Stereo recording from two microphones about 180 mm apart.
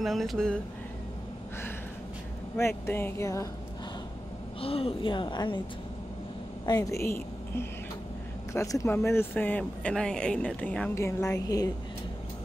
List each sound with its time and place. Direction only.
0.0 s speech: centre (ahead or behind)
2.5 s speech: 15° left (ahead or behind)
4.6 s a woman's voice: 30° left (ahead or behind)
6.6 s a woman's voice: 20° left (ahead or behind)